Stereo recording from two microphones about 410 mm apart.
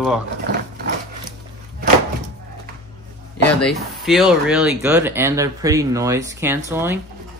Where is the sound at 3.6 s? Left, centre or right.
Centre.